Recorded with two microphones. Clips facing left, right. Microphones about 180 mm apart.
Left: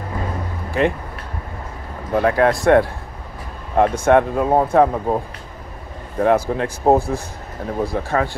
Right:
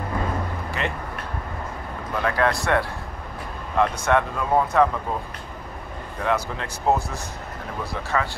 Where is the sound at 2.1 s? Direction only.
50° left (ahead or behind).